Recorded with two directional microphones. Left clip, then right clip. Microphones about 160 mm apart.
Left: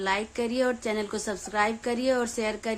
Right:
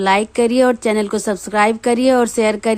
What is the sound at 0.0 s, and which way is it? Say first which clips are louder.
A woman's voice: right 13 dB; 55° right (ahead or behind).